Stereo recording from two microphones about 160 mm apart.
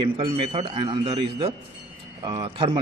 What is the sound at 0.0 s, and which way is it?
Speech, 30° right (ahead or behind).